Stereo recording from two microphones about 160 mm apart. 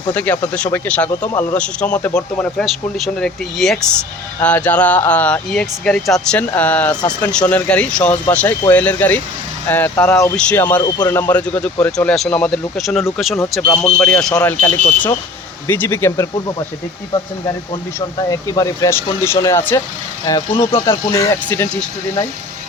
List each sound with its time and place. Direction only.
0.1 s speech: 10° left (ahead or behind)
10.9 s speech: 25° left (ahead or behind)
11.2 s speech: 10° left (ahead or behind)
18.3 s speech: 20° left (ahead or behind)